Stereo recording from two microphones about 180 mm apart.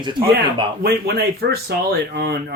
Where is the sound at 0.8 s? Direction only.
60° right (ahead or behind).